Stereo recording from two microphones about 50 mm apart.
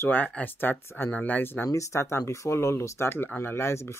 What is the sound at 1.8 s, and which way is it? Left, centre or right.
Speech, left.